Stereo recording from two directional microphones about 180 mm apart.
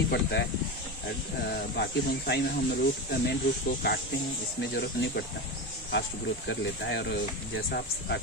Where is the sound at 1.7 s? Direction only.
65° left (ahead or behind).